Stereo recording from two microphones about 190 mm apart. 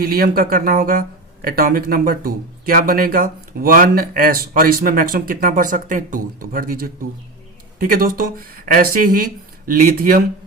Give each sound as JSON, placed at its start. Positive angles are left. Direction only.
{"t": 0.0, "sound": "speech", "side_deg": -50}